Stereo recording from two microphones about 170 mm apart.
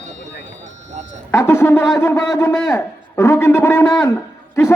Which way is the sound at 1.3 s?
15° left (ahead or behind).